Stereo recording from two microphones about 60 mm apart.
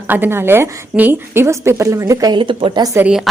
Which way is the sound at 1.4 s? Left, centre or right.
Right.